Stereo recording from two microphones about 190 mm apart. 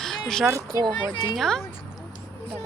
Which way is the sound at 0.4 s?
15° right (ahead or behind).